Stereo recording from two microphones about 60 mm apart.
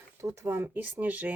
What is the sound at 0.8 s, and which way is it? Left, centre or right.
Speech, right.